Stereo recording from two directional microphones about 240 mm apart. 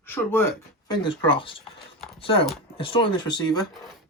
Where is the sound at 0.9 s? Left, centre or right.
Left.